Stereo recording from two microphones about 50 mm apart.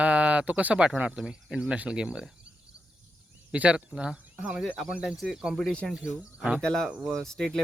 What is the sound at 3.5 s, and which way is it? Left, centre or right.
Speech, right.